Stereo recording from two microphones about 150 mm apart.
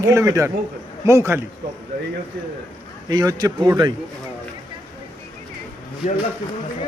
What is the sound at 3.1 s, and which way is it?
Speech, 25° right (ahead or behind).